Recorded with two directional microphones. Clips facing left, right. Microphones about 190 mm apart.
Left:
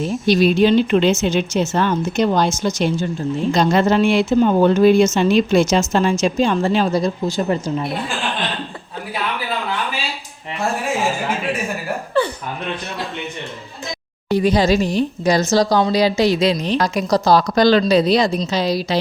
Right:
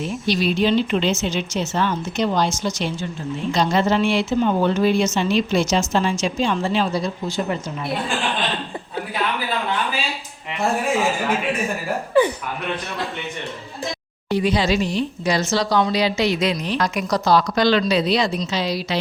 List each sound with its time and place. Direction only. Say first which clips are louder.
0.0 s speech: left 6 dB; 45° left (ahead or behind)
14.3 s speech: left 4 dB; 45° left (ahead or behind)